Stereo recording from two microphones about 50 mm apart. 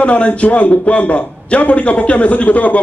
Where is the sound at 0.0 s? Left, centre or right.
Left.